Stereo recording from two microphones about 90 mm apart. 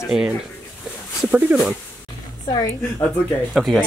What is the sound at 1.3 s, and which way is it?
Speech, 15° right (ahead or behind).